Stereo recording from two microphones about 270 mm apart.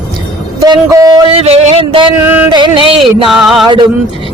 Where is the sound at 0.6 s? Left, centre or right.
Centre.